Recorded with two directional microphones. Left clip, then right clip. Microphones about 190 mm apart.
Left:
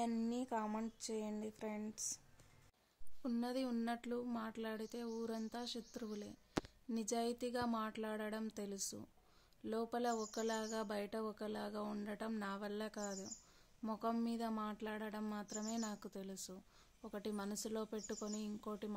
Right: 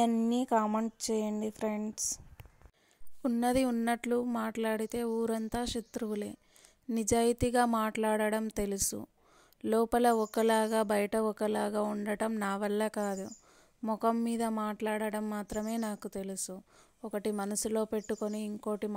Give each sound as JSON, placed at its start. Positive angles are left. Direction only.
{"t": 0.0, "sound": "speech", "side_deg": -40}